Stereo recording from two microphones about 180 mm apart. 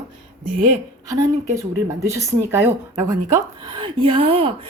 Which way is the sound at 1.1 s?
15° right (ahead or behind).